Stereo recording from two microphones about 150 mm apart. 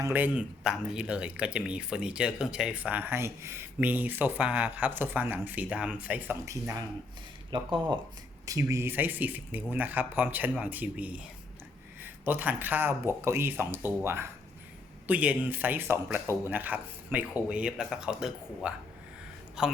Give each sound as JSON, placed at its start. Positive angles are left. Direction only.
{"t": 0.0, "sound": "speech", "side_deg": -10}
{"t": 7.5, "sound": "speech", "side_deg": -30}
{"t": 8.4, "sound": "speech", "side_deg": -20}